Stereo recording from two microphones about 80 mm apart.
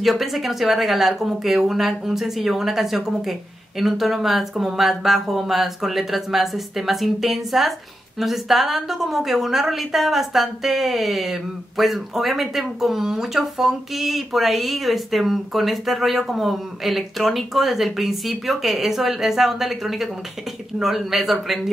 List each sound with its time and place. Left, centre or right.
0.0 s a woman's voice: centre